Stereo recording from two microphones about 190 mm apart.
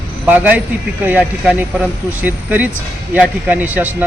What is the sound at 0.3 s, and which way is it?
Speech, 10° right (ahead or behind).